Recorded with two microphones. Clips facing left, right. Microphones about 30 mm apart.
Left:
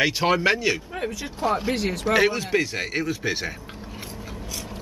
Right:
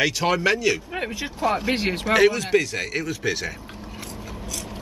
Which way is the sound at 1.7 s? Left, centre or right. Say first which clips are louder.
Right 1 dB; right.